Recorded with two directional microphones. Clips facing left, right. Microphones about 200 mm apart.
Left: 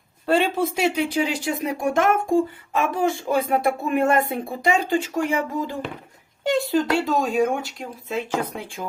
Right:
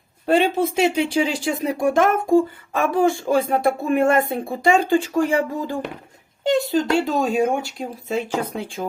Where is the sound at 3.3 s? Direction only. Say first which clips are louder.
Right 2 dB; 30° right (ahead or behind).